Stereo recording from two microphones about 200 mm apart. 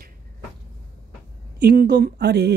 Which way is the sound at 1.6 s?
50° right (ahead or behind).